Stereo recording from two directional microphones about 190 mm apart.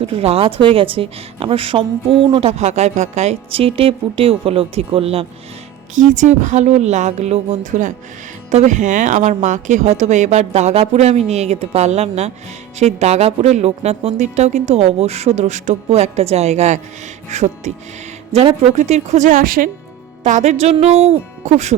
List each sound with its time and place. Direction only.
0.0 s a woman's voice: 30° right (ahead or behind)
5.9 s speech: 40° right (ahead or behind)